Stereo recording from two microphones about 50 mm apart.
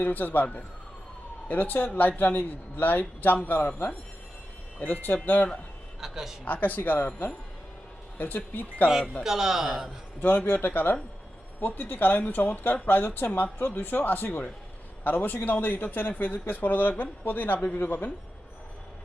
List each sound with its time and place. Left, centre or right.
0.0 s a man's voice: left
1.5 s a man's voice: left
4.8 s a man's voice: left
6.0 s a man's voice: centre
6.4 s a man's voice: left
9.2 s speech: centre
10.2 s a man's voice: left
10.4 s a man's voice: left